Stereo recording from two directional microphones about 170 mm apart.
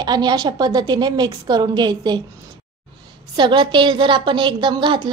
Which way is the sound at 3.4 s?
30° right (ahead or behind).